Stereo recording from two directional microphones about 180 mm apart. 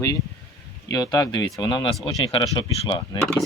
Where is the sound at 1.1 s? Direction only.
20° left (ahead or behind).